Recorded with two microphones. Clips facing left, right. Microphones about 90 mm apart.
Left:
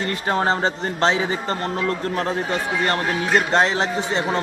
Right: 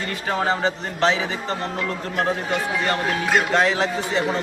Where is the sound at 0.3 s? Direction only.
35° left (ahead or behind).